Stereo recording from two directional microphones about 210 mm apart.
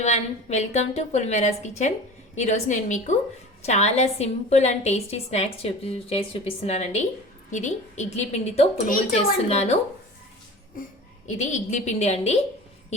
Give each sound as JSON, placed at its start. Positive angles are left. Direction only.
{"t": 0.0, "sound": "a woman's voice", "side_deg": 30}
{"t": 11.3, "sound": "a woman's voice", "side_deg": 35}